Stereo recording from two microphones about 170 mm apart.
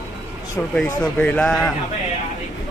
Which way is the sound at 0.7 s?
5° left (ahead or behind).